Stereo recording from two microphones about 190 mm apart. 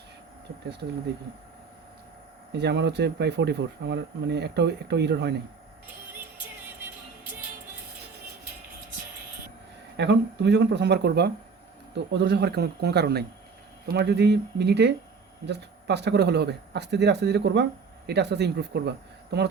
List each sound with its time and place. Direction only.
2.5 s speech: 65° right (ahead or behind)
10.0 s speech: 65° right (ahead or behind)